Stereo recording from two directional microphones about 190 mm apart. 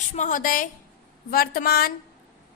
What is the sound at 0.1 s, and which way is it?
A woman's voice, 40° left (ahead or behind).